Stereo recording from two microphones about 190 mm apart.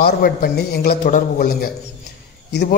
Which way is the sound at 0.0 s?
50° left (ahead or behind).